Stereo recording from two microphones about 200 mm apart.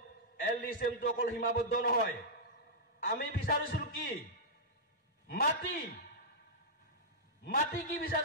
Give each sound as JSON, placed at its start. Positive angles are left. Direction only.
{"t": 0.5, "sound": "a man's voice", "side_deg": 45}
{"t": 3.0, "sound": "a man's voice", "side_deg": 50}
{"t": 5.3, "sound": "a man's voice", "side_deg": 50}
{"t": 7.4, "sound": "a man's voice", "side_deg": 45}